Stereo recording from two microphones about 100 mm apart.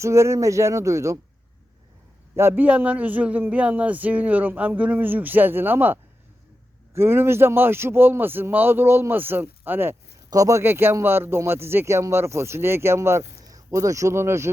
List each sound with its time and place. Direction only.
0.0 s speech: 30° right (ahead or behind)
2.3 s speech: 25° right (ahead or behind)
10.2 s speech: 35° right (ahead or behind)